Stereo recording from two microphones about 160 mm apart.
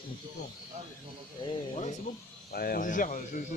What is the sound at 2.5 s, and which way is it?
Speech, 70° left (ahead or behind).